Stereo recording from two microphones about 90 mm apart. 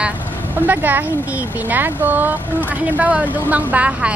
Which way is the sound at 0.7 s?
20° right (ahead or behind).